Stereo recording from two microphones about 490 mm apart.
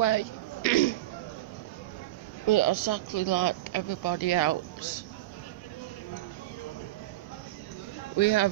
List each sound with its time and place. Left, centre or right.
0.0 s a sound: left
2.4 s speech: left
8.2 s speech: left